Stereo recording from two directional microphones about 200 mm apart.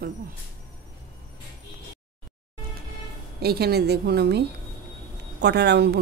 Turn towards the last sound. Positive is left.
turn(degrees=-55)  # may be behind; listen again after turning